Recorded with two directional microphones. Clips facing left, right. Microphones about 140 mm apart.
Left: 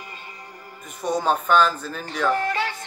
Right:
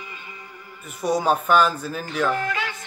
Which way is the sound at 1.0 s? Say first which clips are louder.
Right 1 dB; 10° right (ahead or behind).